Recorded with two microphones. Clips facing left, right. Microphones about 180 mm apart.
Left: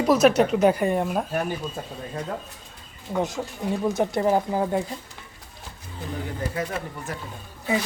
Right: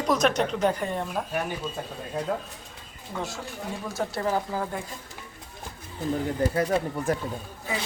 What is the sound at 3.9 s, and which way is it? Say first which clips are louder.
Speech: left 6 dB; 20° left (ahead or behind).